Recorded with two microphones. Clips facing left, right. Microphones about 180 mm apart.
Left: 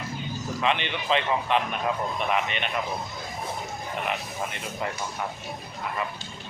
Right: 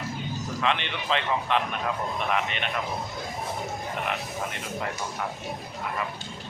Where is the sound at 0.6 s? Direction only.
5° left (ahead or behind).